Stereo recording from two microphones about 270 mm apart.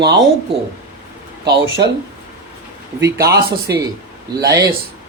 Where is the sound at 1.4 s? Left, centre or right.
Right.